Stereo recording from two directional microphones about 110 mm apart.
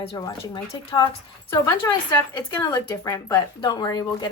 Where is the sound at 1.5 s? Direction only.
30° left (ahead or behind).